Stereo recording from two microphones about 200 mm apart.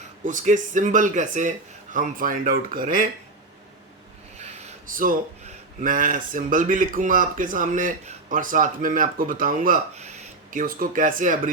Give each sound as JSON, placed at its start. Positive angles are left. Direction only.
{"t": 0.3, "sound": "speech", "side_deg": -40}
{"t": 5.8, "sound": "speech", "side_deg": -40}